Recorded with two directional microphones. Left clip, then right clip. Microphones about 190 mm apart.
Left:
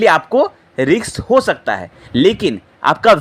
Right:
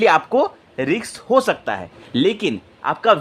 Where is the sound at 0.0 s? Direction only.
10° left (ahead or behind).